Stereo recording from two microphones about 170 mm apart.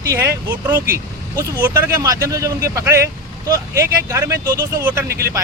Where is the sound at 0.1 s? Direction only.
15° right (ahead or behind).